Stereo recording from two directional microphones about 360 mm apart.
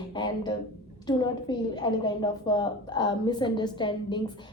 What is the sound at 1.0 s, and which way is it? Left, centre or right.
A woman's voice, centre.